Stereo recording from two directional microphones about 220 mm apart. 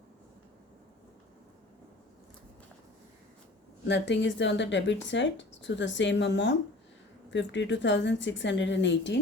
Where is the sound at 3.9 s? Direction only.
55° left (ahead or behind).